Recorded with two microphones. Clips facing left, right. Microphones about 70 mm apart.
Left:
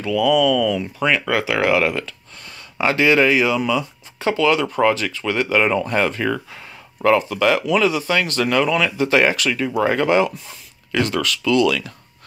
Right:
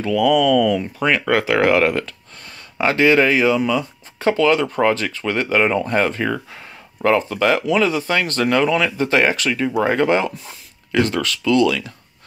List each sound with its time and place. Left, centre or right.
0.0 s speech: right